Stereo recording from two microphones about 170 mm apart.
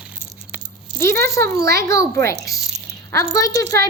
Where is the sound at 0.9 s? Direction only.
15° left (ahead or behind).